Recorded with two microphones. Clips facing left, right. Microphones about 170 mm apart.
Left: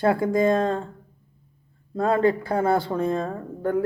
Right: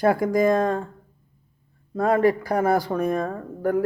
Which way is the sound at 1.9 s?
25° left (ahead or behind).